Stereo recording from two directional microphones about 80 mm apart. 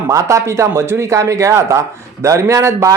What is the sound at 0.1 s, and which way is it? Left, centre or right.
Speech, right.